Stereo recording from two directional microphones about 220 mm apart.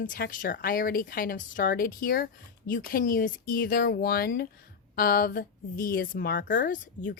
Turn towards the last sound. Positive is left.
turn(degrees=35)  # may be behind; listen again after turning